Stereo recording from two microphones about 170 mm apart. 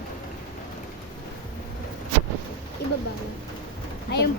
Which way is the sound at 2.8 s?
75° left (ahead or behind).